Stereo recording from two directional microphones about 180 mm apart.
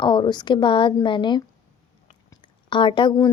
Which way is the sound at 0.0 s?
25° left (ahead or behind).